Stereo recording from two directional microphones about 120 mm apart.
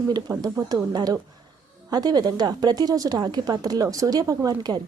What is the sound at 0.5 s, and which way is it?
A woman's voice, 35° right (ahead or behind).